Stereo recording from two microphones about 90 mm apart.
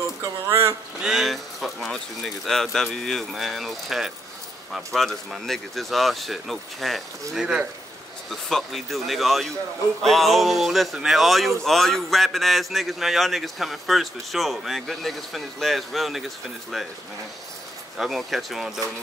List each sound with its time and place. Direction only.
0.2 s speech: 35° right (ahead or behind)
1.0 s a man's voice: centre (ahead or behind)
8.3 s a man's voice: 5° left (ahead or behind)
17.9 s a man's voice: 5° right (ahead or behind)